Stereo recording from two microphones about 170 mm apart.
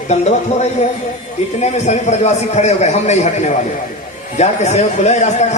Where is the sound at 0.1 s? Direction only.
40° left (ahead or behind).